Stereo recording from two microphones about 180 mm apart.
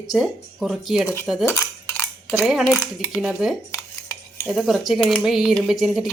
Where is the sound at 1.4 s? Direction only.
15° left (ahead or behind).